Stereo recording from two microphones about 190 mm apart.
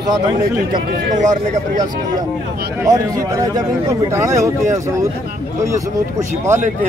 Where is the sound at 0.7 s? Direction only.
40° right (ahead or behind).